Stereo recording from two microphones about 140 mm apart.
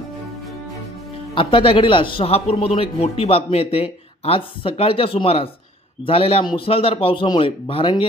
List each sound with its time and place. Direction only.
1.3 s a man's voice: 40° left (ahead or behind)